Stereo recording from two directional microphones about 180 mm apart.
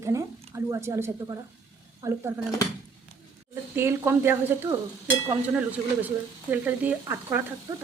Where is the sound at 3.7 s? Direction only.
15° right (ahead or behind).